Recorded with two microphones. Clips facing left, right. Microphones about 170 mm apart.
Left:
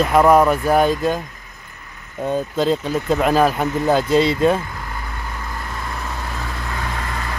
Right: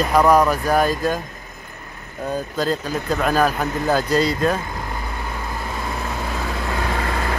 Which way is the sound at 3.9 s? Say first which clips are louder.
Left 3 dB; 25° left (ahead or behind).